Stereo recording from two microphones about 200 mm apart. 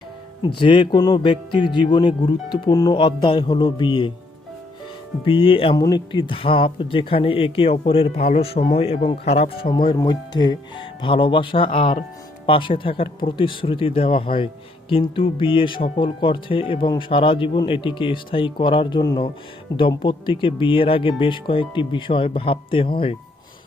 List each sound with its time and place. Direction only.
0.4 s speech: 25° left (ahead or behind)
5.2 s speech: 25° left (ahead or behind)